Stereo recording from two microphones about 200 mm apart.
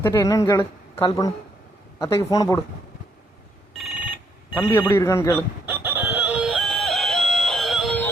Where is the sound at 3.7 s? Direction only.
Centre (ahead or behind).